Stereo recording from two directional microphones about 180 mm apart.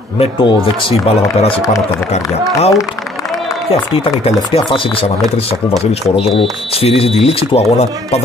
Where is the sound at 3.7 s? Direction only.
30° left (ahead or behind).